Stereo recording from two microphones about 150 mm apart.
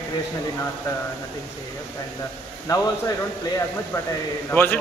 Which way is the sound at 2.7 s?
25° left (ahead or behind).